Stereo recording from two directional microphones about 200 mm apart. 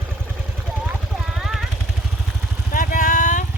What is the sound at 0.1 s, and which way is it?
Vehicle, 5° right (ahead or behind).